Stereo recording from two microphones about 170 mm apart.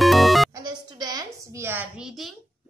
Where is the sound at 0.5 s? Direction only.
25° right (ahead or behind).